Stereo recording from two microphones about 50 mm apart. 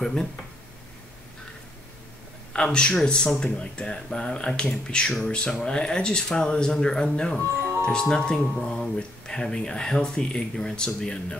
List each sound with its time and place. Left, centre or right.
0.0 s speech: centre
2.5 s a man's voice: centre